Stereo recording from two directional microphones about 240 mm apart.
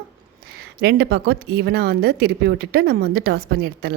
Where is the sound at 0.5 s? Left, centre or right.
Right.